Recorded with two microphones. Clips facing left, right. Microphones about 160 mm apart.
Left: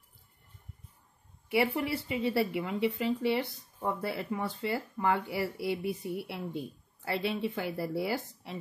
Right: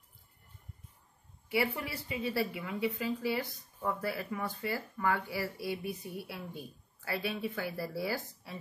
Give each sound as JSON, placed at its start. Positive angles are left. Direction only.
{"t": 1.5, "sound": "a woman's voice", "side_deg": 25}